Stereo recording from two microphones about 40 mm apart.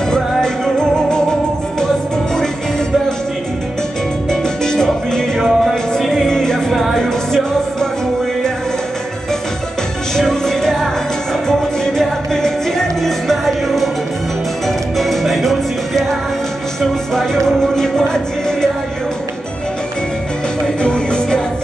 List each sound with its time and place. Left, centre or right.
0.1 s music: centre
4.3 s salsa music: centre
5.4 s music: centre
6.7 s music: centre
7.0 s music: centre
10.4 s music: centre
15.0 s music: centre
17.1 s music: centre
20.8 s music: left